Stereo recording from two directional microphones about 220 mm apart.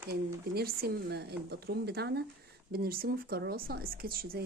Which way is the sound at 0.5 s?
45° right (ahead or behind).